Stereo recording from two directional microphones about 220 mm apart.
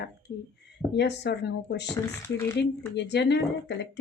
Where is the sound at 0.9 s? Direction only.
50° left (ahead or behind).